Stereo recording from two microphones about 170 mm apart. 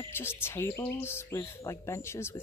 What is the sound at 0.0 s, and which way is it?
Speech, 15° left (ahead or behind).